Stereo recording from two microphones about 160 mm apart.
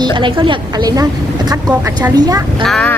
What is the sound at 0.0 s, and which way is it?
A woman's voice, 30° right (ahead or behind).